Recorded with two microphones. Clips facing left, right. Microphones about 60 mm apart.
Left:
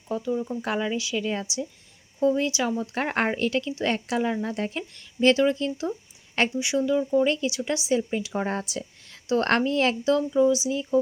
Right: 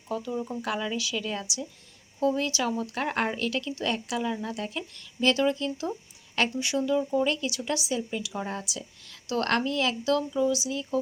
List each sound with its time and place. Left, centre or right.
0.3 s speech: centre
0.6 s a woman's voice: left
6.6 s speech: left
6.9 s speech: centre
7.3 s speech: left